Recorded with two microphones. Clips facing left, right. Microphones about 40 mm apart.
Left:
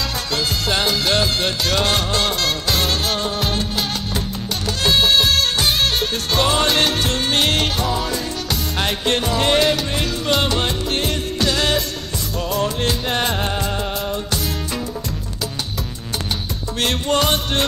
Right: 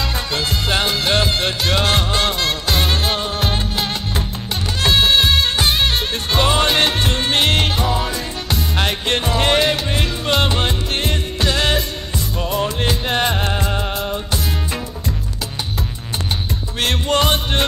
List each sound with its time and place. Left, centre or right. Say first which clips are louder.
0.3 s music: even; centre
16.8 s music: right 1 dB; centre